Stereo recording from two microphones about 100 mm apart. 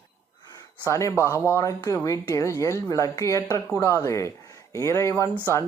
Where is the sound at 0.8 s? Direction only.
30° left (ahead or behind).